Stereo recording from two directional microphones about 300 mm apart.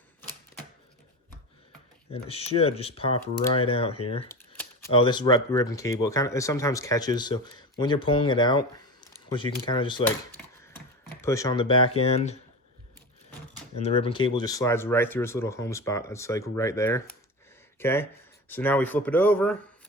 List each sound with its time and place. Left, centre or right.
2.1 s speech: centre
13.7 s speech: centre